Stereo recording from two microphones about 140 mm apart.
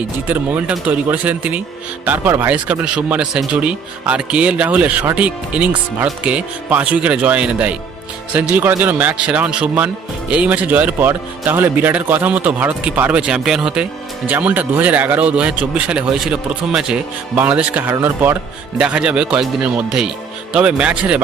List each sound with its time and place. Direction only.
0.3 s speech: 10° right (ahead or behind)